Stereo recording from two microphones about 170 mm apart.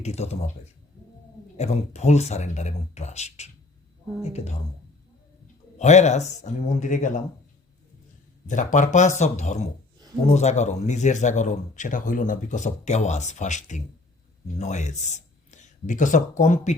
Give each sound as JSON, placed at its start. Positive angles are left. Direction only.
{"t": 0.0, "sound": "speech", "side_deg": 40}
{"t": 1.5, "sound": "speech", "side_deg": 40}
{"t": 5.7, "sound": "speech", "side_deg": 45}
{"t": 8.4, "sound": "speech", "side_deg": 50}